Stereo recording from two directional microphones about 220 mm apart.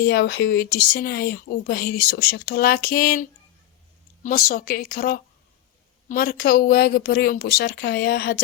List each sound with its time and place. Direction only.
0.0 s speech: 45° left (ahead or behind)